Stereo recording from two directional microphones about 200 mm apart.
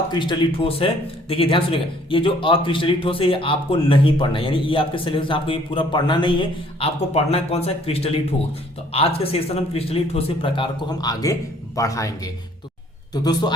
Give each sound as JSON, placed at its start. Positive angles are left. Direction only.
{"t": 0.1, "sound": "speech", "side_deg": 25}